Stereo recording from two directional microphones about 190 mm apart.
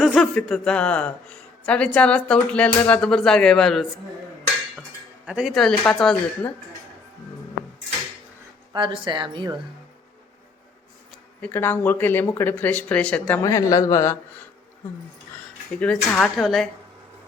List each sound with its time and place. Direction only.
0.0 s speech: centre (ahead or behind)
5.2 s speech: 5° right (ahead or behind)
8.7 s a woman's voice: 25° right (ahead or behind)
11.4 s speech: 10° left (ahead or behind)
13.4 s speech: 20° left (ahead or behind)
15.8 s speech: 5° left (ahead or behind)